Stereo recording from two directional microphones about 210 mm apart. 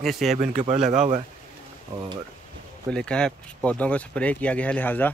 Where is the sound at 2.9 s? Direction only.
5° left (ahead or behind).